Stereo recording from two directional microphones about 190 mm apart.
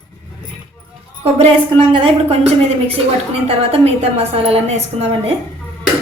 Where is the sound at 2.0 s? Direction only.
35° right (ahead or behind).